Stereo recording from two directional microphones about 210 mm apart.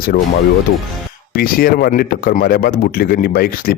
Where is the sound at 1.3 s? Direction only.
45° left (ahead or behind).